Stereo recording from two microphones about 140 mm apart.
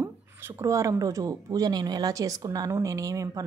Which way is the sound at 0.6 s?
20° right (ahead or behind).